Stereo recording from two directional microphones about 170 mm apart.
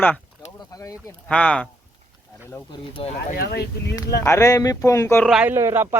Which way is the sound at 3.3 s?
65° left (ahead or behind).